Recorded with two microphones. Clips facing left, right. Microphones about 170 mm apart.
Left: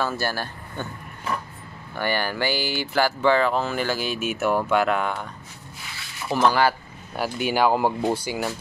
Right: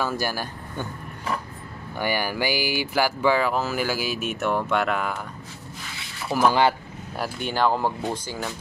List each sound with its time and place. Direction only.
0.0 s speech: 10° right (ahead or behind)
2.0 s speech: 10° right (ahead or behind)
6.3 s speech: 5° right (ahead or behind); by 8.5 s 10° left (ahead or behind)